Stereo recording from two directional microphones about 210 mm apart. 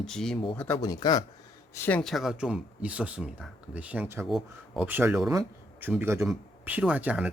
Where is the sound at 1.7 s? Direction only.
10° left (ahead or behind).